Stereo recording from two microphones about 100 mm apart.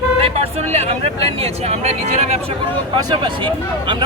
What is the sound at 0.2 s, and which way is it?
Speech, 80° right.